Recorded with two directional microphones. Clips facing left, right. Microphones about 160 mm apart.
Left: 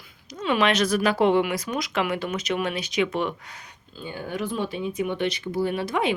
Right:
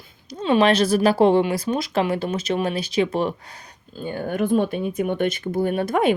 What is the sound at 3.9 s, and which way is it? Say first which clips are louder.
Speech: right 6 dB; 50° right (ahead or behind).